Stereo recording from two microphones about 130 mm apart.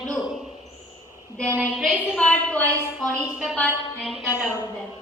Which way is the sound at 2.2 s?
10° left (ahead or behind).